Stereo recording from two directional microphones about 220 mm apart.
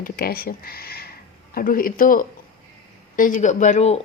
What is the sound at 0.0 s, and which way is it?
Speech, 45° left (ahead or behind).